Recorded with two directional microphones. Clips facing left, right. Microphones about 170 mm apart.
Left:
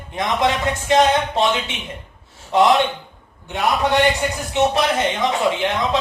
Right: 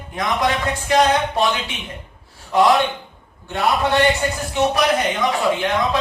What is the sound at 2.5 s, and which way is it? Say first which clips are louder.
Speech: even; 20° left (ahead or behind).